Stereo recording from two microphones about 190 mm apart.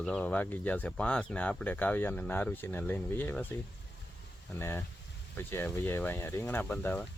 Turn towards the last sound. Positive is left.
turn(degrees=10)  # may be behind; listen again after turning